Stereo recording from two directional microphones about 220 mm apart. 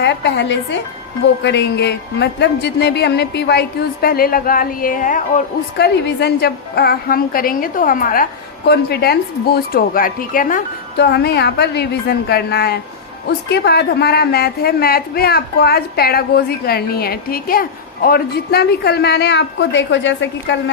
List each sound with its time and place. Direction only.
0.0 s a woman's voice: 50° left (ahead or behind)